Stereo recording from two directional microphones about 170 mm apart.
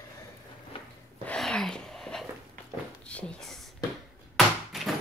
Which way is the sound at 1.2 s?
5° left (ahead or behind).